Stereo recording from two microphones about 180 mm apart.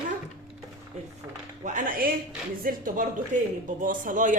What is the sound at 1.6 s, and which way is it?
A woman's voice, 45° right (ahead or behind).